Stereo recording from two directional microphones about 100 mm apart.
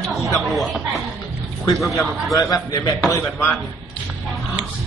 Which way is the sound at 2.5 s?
35° left (ahead or behind).